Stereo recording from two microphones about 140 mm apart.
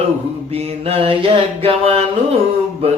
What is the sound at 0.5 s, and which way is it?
Mantra, 45° right (ahead or behind).